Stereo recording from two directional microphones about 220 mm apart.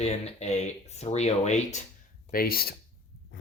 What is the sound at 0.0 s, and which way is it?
Speech, 30° left (ahead or behind).